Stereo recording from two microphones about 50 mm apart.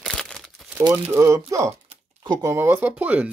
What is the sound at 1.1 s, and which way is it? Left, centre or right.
Speech, right.